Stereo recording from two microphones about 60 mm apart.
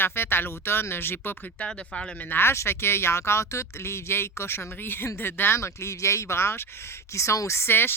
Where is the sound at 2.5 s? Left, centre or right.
Left.